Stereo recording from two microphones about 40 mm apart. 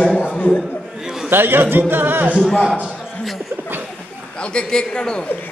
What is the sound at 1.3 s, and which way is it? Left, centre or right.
Music, right.